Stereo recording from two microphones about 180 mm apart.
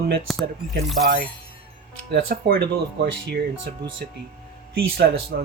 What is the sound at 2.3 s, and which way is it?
Speech, 55° right (ahead or behind).